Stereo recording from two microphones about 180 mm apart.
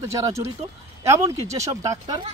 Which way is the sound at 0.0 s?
15° right (ahead or behind).